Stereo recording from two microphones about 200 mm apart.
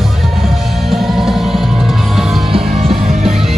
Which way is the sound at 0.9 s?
Centre (ahead or behind).